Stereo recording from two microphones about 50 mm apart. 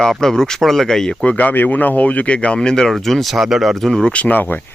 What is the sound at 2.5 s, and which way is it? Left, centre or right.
Speech, centre.